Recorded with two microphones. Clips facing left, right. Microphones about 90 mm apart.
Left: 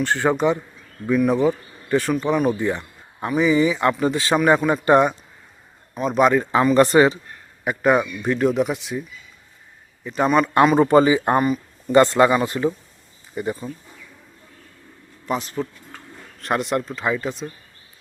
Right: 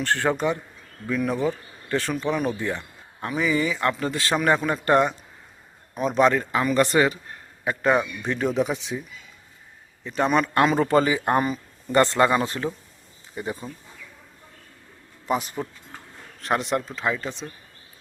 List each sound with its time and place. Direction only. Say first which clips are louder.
0.0 s speech: left 4 dB; 15° left (ahead or behind)
5.9 s a man's voice: left 2 dB; centre (ahead or behind)
6.2 s speech: left 3 dB; 15° left (ahead or behind)
6.5 s speech: left 6 dB; 25° left (ahead or behind)
6.7 s a man's voice: left 5 dB; 40° left (ahead or behind)
7.6 s speech: left 3 dB; 5° left (ahead or behind)
10.0 s speech: left 3 dB; 5° left (ahead or behind)
15.3 s speech: left 1 dB; 5° right (ahead or behind)